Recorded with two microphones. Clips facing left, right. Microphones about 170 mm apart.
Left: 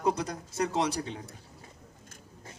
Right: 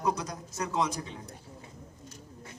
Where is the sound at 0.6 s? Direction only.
70° left (ahead or behind).